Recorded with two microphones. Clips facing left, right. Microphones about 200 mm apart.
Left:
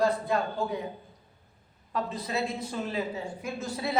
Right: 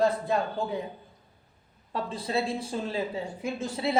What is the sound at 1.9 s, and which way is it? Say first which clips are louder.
A woman's voice: right 1 dB; 30° right (ahead or behind).